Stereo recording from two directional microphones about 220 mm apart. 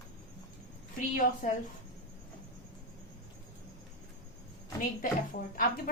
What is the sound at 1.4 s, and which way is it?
Speech, 35° left (ahead or behind).